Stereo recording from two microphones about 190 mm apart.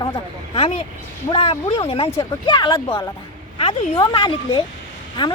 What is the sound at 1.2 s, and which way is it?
Speech, 30° left (ahead or behind).